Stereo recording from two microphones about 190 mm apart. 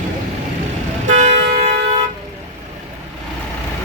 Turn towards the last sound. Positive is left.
turn(degrees=-35)  # may be behind; listen again after turning